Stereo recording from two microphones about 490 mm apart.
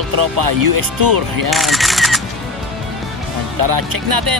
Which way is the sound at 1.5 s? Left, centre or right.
Centre.